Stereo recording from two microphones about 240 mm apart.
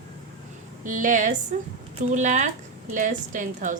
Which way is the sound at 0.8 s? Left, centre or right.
Right.